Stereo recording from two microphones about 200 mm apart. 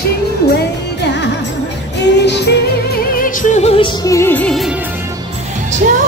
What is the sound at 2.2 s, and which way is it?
Music, 55° left (ahead or behind).